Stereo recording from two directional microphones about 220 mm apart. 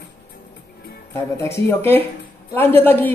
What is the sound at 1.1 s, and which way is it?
Speech, 10° left (ahead or behind).